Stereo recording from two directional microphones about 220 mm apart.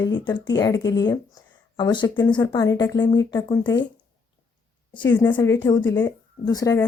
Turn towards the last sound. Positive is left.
turn(degrees=15)  # may be behind; listen again after turning